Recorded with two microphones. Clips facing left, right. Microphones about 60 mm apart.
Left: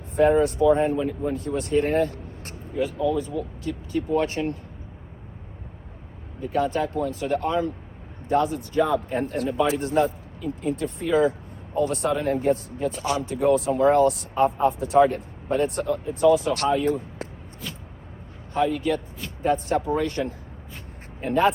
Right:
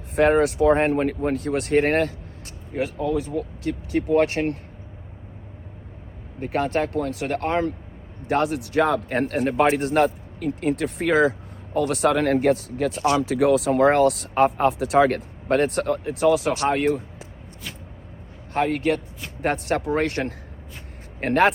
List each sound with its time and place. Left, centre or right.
0.2 s speech: right
3.9 s speech: right
6.4 s speech: right
7.4 s speech: right
8.3 s speech: right
18.7 s speech: right